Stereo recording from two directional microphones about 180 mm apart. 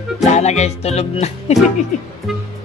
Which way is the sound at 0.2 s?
40° left (ahead or behind).